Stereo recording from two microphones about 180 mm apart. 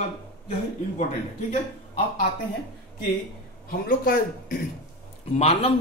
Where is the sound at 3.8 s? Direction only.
55° left (ahead or behind).